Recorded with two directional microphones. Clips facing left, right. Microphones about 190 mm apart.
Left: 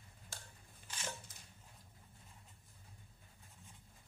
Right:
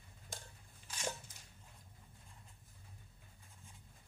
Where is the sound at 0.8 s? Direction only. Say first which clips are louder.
Right 5 dB; 10° right (ahead or behind).